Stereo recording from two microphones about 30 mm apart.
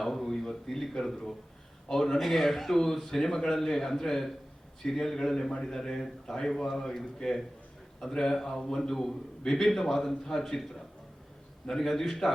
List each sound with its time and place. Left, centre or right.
0.0 s a man's voice: centre
11.7 s a man's voice: centre